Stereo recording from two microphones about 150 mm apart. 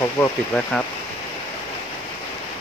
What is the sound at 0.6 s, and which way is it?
Speech, 5° left (ahead or behind).